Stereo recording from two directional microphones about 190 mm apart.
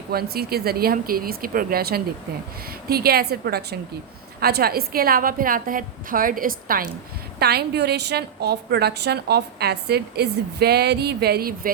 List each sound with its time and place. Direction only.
0.1 s a woman's voice: 55° right (ahead or behind)